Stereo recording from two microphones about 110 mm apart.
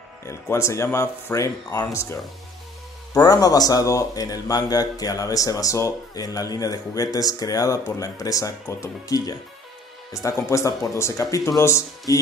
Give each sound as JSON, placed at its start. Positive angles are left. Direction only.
{"t": 0.3, "sound": "speech", "side_deg": 25}
{"t": 3.2, "sound": "speech", "side_deg": 35}